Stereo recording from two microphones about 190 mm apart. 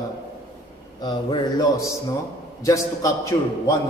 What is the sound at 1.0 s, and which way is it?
Mantra, 20° left (ahead or behind).